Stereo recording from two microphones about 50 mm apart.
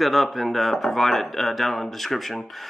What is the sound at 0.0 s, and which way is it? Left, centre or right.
Speech, centre.